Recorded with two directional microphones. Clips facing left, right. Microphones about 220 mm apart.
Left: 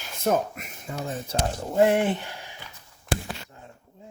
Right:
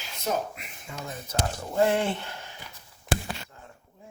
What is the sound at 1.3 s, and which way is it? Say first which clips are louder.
Speech: even; 20° left (ahead or behind).